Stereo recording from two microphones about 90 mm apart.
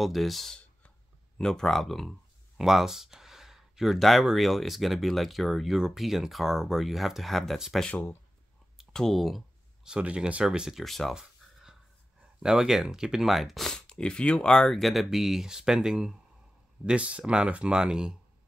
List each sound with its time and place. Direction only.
0.0 s speech: centre (ahead or behind)
7.8 s speech: 15° left (ahead or behind)
8.9 s speech: centre (ahead or behind)
12.4 s speech: 5° right (ahead or behind)